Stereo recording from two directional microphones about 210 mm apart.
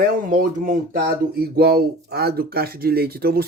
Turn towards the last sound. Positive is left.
turn(degrees=-45)  # may be behind; listen again after turning